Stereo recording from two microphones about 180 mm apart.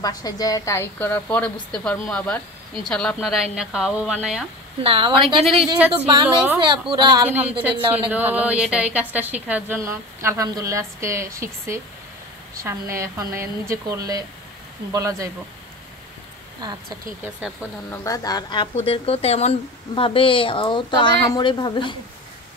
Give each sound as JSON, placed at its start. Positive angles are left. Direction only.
{"t": 0.0, "sound": "a woman's voice", "side_deg": 20}
{"t": 4.8, "sound": "speech", "side_deg": -30}
{"t": 5.2, "sound": "a woman's voice", "side_deg": 0}
{"t": 6.9, "sound": "speech", "side_deg": -25}
{"t": 7.2, "sound": "a woman's voice", "side_deg": -10}
{"t": 17.9, "sound": "speech", "side_deg": 20}
{"t": 18.8, "sound": "speech", "side_deg": 35}